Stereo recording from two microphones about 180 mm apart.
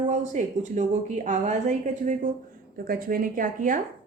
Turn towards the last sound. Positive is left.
turn(degrees=-50)  # may be behind; listen again after turning